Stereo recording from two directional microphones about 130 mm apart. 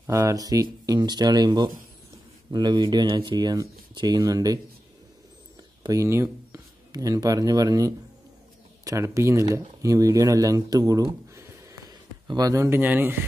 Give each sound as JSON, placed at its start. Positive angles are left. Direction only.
{"t": 0.0, "sound": "speech", "side_deg": -25}
{"t": 5.9, "sound": "speech", "side_deg": -20}